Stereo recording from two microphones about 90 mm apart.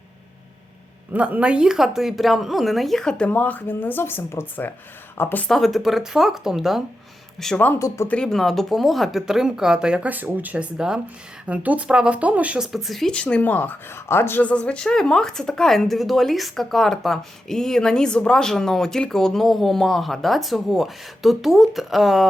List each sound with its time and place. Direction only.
1.1 s speech: 15° right (ahead or behind); by 3.2 s 5° left (ahead or behind)
3.2 s speech: 20° left (ahead or behind)
5.5 s a man's voice: centre (ahead or behind)
7.8 s speech: 35° left (ahead or behind)
8.0 s speech: 10° left (ahead or behind)
14.4 s speech: 10° left (ahead or behind)